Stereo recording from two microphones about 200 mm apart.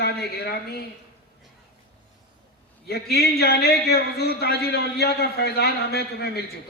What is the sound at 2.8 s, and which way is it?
A man's voice, 50° left (ahead or behind).